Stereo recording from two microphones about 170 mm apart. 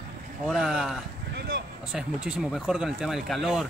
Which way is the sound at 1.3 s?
70° right (ahead or behind).